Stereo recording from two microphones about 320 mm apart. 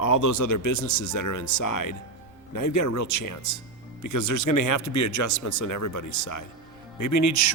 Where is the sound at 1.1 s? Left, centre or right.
Left.